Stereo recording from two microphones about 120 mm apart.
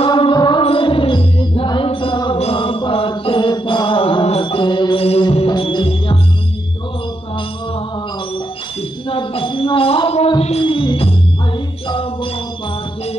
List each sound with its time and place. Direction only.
0.0 s music: 45° left (ahead or behind)
2.3 s mantra: 50° left (ahead or behind)
5.5 s music: 40° left (ahead or behind)
9.1 s a sound: 45° left (ahead or behind)
10.6 s music: 45° left (ahead or behind)